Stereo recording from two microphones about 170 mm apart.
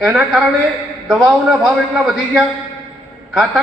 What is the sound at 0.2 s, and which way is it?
A man's voice, 5° right (ahead or behind).